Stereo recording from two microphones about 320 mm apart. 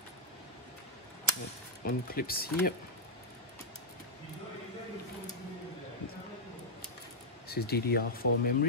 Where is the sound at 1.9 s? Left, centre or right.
Left.